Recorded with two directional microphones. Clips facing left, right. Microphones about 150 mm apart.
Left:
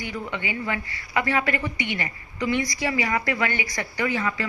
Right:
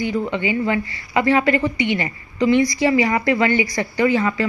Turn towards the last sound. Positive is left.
turn(degrees=-30)  # may be behind; listen again after turning